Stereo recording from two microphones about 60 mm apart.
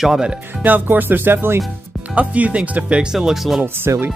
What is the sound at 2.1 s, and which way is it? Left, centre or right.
Speech, right.